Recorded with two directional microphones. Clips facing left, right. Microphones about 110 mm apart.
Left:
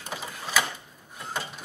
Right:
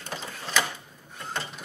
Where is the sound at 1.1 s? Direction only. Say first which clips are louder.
Even; 5° left (ahead or behind).